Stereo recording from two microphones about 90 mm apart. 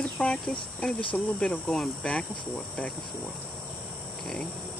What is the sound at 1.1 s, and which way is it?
Cricket, 10° left (ahead or behind).